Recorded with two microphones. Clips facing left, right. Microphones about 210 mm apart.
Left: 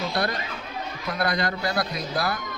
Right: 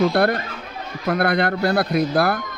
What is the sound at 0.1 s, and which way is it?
A man's voice, 60° right (ahead or behind).